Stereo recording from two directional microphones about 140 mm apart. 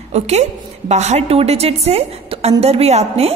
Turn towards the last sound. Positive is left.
turn(degrees=-45)  # may be behind; listen again after turning